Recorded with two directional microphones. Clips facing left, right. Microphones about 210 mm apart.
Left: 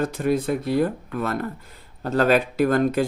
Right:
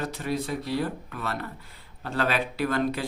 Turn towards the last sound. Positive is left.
turn(degrees=45)  # may be behind; listen again after turning